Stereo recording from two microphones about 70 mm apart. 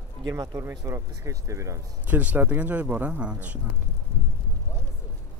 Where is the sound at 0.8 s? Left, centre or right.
Right.